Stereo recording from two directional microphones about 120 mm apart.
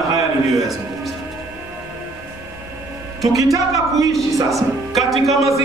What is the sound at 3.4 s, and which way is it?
Speech, 25° right (ahead or behind).